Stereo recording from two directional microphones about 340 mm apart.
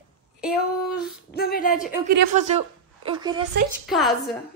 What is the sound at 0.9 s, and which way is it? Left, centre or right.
Speech, left.